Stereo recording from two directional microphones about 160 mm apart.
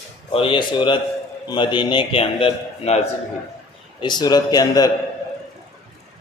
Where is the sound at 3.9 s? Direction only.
25° left (ahead or behind).